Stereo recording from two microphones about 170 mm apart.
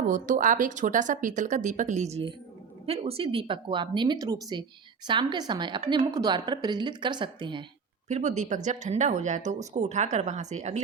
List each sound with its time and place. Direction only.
0.1 s speech: 50° right (ahead or behind); by 7.6 s 25° right (ahead or behind)
8.0 s speech: 45° right (ahead or behind)